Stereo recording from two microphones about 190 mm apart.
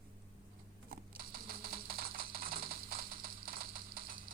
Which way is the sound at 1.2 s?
50° right (ahead or behind).